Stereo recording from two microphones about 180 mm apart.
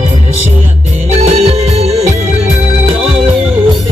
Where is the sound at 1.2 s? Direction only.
35° right (ahead or behind).